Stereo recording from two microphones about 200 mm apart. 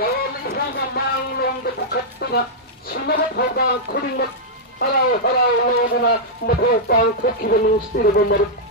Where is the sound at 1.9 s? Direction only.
55° left (ahead or behind).